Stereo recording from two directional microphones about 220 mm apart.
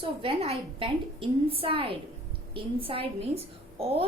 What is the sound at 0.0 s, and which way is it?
A woman's voice, 25° right (ahead or behind).